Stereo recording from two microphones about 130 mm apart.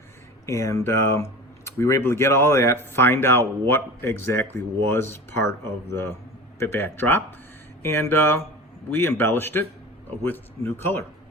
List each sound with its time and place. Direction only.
0.4 s a man's voice: 25° left (ahead or behind)